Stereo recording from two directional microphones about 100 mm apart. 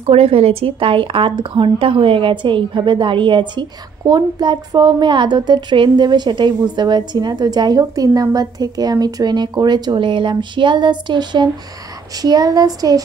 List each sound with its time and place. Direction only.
0.0 s speech: 85° right; by 13.0 s 40° right (ahead or behind)